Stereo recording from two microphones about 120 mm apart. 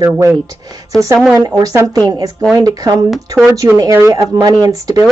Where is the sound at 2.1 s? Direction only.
30° right (ahead or behind).